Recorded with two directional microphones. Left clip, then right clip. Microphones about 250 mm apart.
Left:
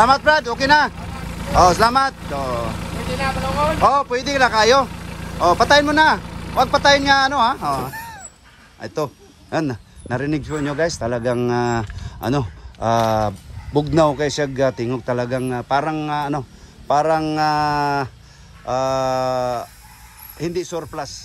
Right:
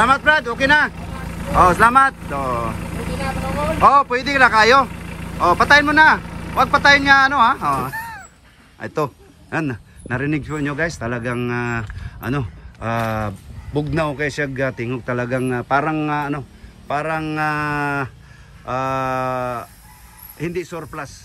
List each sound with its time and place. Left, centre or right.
0.0 s speech: centre